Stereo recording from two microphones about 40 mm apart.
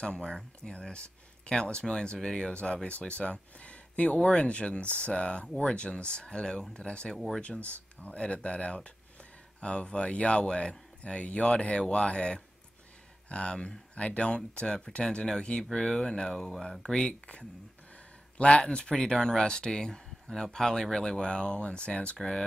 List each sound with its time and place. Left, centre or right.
0.0 s speech: left
7.7 s speech: left; by 16.9 s centre
16.9 s speech: left